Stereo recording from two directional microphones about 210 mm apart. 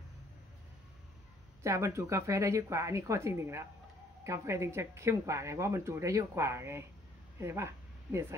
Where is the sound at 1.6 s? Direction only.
15° right (ahead or behind).